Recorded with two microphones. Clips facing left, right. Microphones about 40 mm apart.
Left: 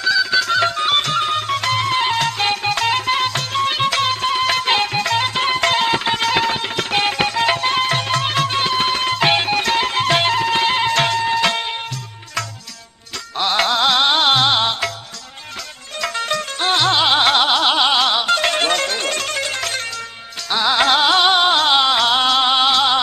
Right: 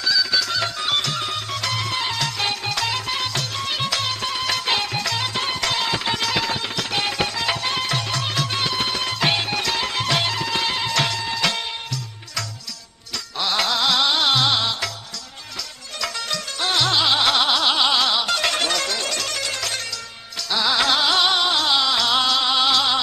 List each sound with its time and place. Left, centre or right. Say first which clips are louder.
0.0 s music: left 5 dB; left
13.4 s music: left 5 dB; left
16.0 s music: left 6 dB; left